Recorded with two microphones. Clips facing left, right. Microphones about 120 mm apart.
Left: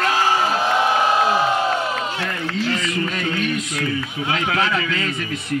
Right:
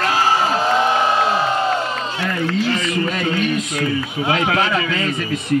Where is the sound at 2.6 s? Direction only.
20° right (ahead or behind).